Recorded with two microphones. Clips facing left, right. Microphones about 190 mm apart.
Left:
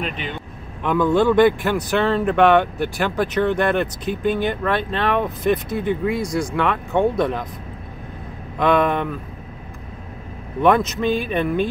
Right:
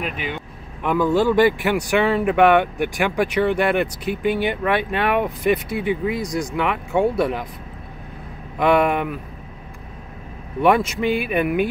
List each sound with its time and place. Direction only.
0.0 s speech: 10° right (ahead or behind)
8.5 s speech: 5° right (ahead or behind)
10.6 s speech: 10° right (ahead or behind)